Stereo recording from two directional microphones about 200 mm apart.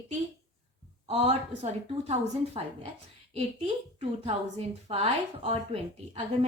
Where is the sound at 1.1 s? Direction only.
30° right (ahead or behind).